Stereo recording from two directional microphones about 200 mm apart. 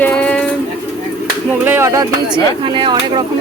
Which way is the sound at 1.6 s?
10° right (ahead or behind).